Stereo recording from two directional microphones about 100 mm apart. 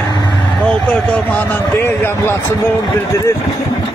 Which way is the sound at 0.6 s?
10° left (ahead or behind).